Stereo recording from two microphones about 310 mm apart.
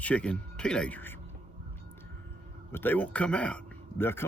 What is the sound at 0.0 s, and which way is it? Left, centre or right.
Speech, centre.